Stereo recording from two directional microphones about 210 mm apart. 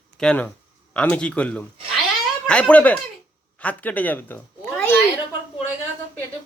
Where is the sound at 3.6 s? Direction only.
5° left (ahead or behind).